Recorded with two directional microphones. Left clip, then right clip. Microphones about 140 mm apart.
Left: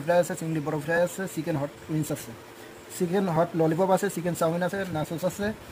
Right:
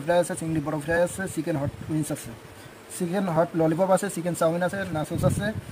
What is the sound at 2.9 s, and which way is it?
Speech, 5° right (ahead or behind).